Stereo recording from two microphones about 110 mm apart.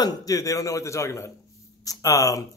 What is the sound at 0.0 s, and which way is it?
A man's voice, 35° left (ahead or behind).